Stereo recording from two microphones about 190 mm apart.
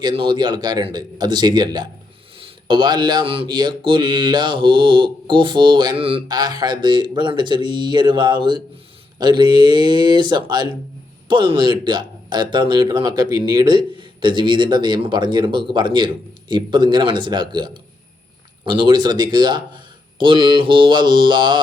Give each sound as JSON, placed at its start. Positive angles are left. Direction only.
{"t": 0.0, "sound": "speech", "side_deg": -25}